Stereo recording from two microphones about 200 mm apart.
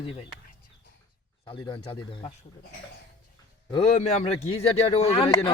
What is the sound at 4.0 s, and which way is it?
Speech, 35° left (ahead or behind).